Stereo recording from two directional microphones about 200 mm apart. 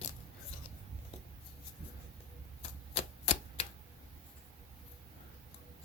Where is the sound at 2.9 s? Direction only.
30° left (ahead or behind).